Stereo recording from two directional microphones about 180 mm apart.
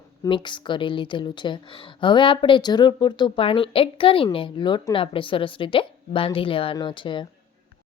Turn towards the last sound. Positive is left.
turn(degrees=25)  # may be behind; listen again after turning